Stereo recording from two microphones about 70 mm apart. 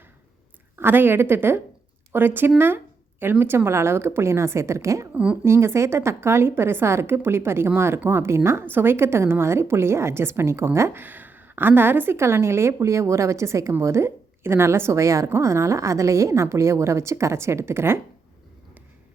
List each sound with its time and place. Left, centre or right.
0.8 s a woman's voice: right
5.1 s speech: centre
5.5 s a woman's voice: right